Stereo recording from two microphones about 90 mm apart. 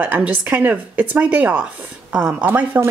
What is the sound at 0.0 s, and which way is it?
A woman's voice, 20° right (ahead or behind).